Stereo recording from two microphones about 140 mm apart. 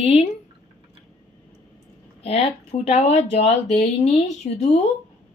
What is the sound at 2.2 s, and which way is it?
Speech, 45° left (ahead or behind).